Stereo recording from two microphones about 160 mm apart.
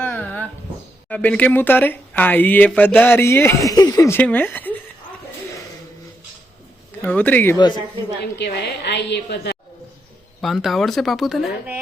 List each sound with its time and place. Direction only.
0.0 s dog: 10° left (ahead or behind)
1.0 s speech: 5° left (ahead or behind)
7.0 s speech: 10° left (ahead or behind)
8.2 s a woman's voice: 90° left
10.4 s speech: centre (ahead or behind)